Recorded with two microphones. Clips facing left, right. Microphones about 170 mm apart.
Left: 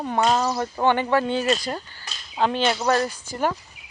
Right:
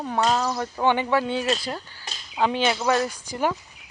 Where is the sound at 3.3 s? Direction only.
15° right (ahead or behind).